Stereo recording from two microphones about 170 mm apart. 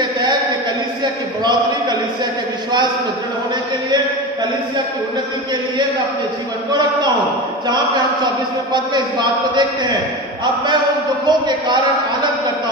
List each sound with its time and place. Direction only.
6.7 s a man's voice: 25° right (ahead or behind)
11.2 s a man's voice: 25° right (ahead or behind)